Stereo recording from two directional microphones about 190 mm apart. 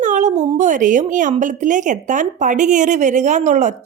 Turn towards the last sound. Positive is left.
turn(degrees=-40)  # may be behind; listen again after turning